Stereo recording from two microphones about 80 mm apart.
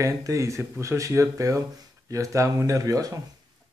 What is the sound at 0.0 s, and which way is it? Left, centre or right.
A man's voice, right.